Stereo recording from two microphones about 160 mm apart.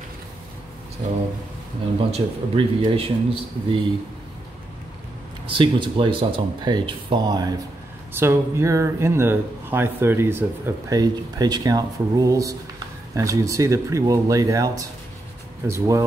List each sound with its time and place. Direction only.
2.0 s speech: 35° right (ahead or behind)
5.6 s speech: 30° right (ahead or behind)
8.1 s speech: 15° right (ahead or behind)